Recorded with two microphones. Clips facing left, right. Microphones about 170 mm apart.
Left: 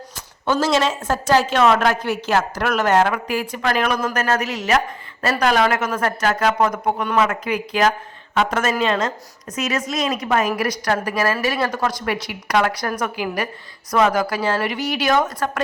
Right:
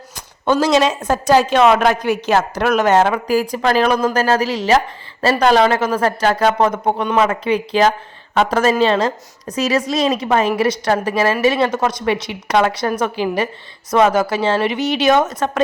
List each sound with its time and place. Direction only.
0.4 s a woman's voice: 15° right (ahead or behind)